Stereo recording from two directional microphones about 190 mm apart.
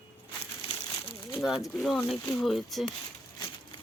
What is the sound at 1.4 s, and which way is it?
Speech, centre (ahead or behind).